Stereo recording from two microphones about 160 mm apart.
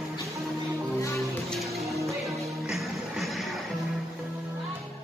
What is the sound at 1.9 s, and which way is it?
Music, 20° right (ahead or behind).